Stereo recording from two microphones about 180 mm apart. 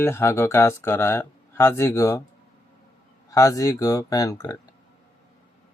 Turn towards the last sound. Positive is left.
turn(degrees=20)  # may be behind; listen again after turning